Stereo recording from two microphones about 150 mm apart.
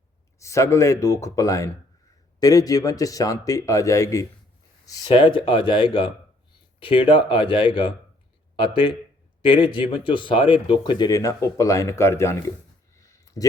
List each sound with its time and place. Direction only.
0.3 s speech: 20° left (ahead or behind)
5.0 s speech: 35° left (ahead or behind)
13.1 s a sound: 25° left (ahead or behind)